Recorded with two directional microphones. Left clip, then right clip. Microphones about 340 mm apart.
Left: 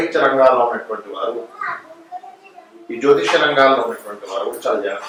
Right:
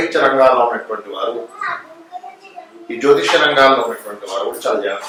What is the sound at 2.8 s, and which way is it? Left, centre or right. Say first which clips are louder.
A man's voice: right 2 dB; centre.